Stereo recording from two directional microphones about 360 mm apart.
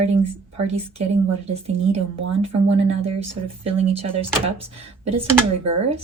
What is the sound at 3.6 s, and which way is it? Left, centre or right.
Speech, centre.